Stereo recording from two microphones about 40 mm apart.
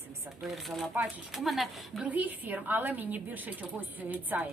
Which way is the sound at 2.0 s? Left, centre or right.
Right.